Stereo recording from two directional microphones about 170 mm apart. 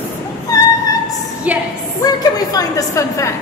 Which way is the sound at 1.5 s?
10° right (ahead or behind).